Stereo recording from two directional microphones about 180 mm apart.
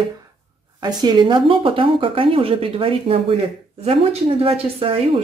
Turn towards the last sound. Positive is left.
turn(degrees=-30)  # may be behind; listen again after turning